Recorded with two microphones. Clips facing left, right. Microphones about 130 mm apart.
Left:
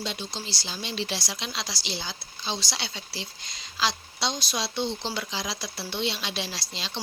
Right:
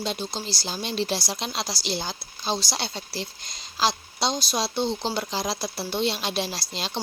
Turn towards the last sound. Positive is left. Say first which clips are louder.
# right 5 dB
turn(degrees=-45)  # may be behind; listen again after turning